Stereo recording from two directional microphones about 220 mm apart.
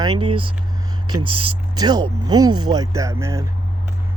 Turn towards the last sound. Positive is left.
turn(degrees=-15)  # may be behind; listen again after turning